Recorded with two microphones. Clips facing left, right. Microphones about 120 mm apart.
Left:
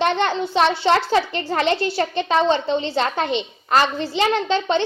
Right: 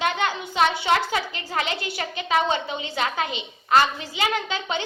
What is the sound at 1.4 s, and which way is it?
A child's voice, 40° left (ahead or behind).